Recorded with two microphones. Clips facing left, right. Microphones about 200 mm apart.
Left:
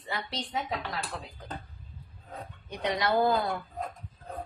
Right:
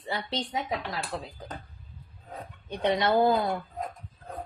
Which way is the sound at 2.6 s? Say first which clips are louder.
Right 4 dB; 25° right (ahead or behind).